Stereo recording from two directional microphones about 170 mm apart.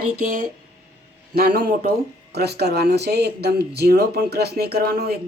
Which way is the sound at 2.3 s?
75° right (ahead or behind).